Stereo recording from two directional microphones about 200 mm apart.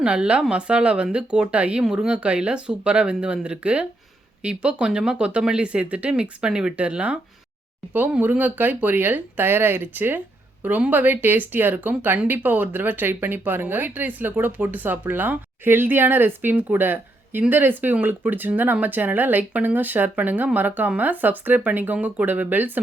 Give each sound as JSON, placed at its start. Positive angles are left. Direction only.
{"t": 0.0, "sound": "speech", "side_deg": -5}